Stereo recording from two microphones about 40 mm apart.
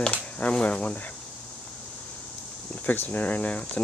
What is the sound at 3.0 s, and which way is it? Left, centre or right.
Speech, left.